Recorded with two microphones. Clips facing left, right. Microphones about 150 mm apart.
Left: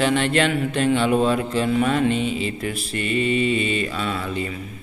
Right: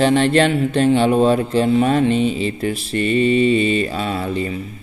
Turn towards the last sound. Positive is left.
turn(degrees=-35)  # may be behind; listen again after turning